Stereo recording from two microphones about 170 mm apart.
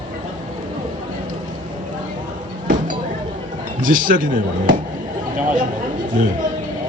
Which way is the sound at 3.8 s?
55° right (ahead or behind).